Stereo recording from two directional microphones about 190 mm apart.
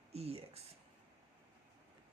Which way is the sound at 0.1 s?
30° right (ahead or behind).